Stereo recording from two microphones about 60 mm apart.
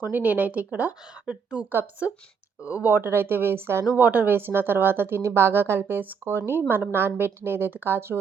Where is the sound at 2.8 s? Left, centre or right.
Right.